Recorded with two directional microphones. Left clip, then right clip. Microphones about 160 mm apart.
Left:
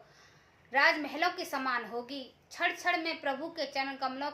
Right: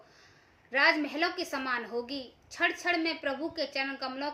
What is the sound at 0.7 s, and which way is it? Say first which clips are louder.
A woman's voice: right 1 dB; 15° right (ahead or behind).